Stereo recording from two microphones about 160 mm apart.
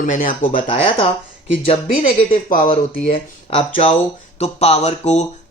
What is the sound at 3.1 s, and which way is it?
Speech, 35° left (ahead or behind).